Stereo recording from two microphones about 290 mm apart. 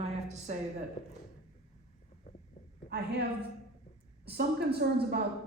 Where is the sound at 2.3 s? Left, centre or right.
Left.